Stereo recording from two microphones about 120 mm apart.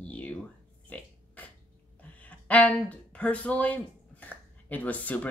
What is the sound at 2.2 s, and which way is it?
Speech, 10° left (ahead or behind).